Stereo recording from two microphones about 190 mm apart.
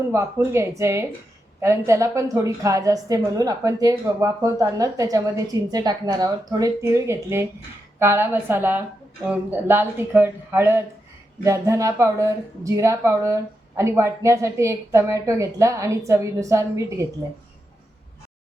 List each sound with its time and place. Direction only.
0.1 s speech: 15° right (ahead or behind)